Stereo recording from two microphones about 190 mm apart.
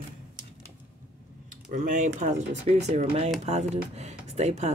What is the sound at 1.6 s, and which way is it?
Speech, 45° right (ahead or behind).